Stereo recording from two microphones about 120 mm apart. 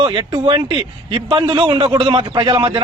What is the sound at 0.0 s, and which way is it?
Speech, 50° right (ahead or behind).